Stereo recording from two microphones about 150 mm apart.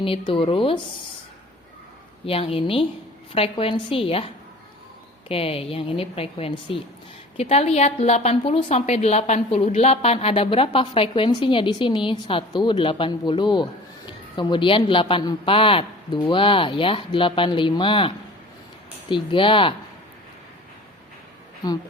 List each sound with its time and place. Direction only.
0.0 s a woman's voice: 35° left (ahead or behind)
2.2 s a woman's voice: 40° left (ahead or behind)
5.3 s a woman's voice: 40° left (ahead or behind)